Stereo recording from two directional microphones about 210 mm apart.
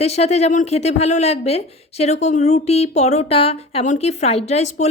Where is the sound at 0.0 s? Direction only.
30° left (ahead or behind).